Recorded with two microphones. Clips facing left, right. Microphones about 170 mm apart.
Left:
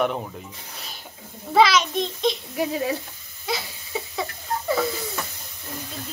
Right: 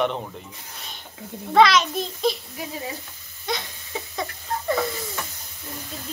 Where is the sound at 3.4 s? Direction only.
5° left (ahead or behind).